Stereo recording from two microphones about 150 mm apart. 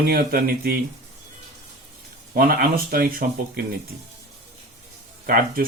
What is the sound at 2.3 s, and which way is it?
Speech, 70° right (ahead or behind).